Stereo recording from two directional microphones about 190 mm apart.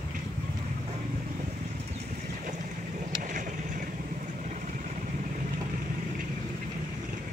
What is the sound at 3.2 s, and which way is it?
Vehicle, 45° right (ahead or behind).